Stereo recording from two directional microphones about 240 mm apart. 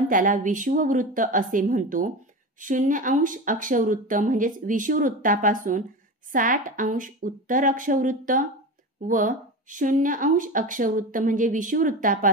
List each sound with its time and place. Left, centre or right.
0.1 s speech: right